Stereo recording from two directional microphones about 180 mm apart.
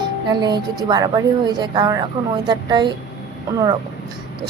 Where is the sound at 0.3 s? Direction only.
25° right (ahead or behind).